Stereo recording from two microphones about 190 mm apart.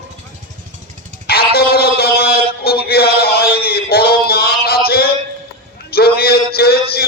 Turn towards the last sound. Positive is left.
turn(degrees=55)  # may be behind; listen again after turning